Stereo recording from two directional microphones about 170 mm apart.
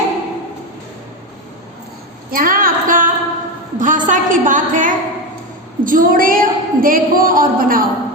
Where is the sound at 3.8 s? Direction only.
50° right (ahead or behind).